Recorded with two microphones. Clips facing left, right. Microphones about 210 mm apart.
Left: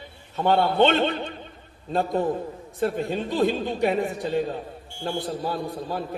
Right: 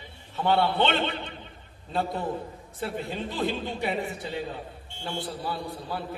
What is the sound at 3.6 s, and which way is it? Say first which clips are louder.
A man's voice: left 6 dB; 45° left (ahead or behind).